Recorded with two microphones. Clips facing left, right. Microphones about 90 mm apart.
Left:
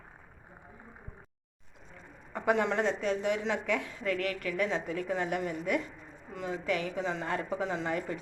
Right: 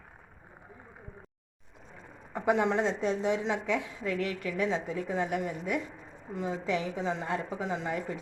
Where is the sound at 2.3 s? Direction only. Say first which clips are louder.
Right 1 dB; 15° right (ahead or behind).